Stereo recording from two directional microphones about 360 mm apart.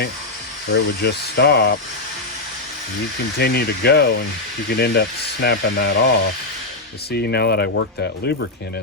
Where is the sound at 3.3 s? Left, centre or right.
Left.